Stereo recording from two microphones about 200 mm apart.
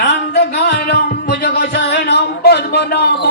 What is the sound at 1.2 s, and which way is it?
Music, 60° left (ahead or behind).